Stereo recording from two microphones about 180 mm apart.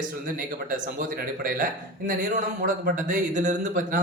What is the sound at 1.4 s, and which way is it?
A man's voice, 50° right (ahead or behind).